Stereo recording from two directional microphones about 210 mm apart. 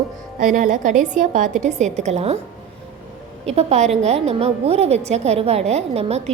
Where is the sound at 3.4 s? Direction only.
30° right (ahead or behind).